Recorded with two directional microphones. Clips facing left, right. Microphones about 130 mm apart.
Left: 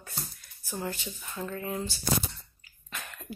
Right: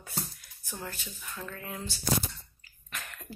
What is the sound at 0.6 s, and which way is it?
Speech, 5° left (ahead or behind).